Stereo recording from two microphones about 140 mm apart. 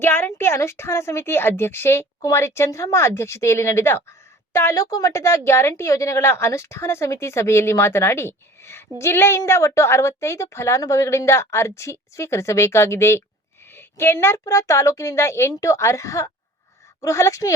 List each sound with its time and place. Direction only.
0.0 s a woman's voice: 15° left (ahead or behind)